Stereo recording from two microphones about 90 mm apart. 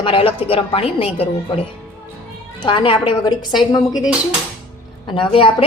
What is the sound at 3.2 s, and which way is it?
Speech, 55° left (ahead or behind).